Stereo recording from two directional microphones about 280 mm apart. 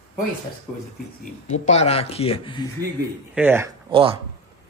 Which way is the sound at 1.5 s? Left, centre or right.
Left.